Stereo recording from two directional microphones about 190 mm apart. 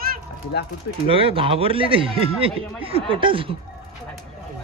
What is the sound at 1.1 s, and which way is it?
Speech, 30° right (ahead or behind).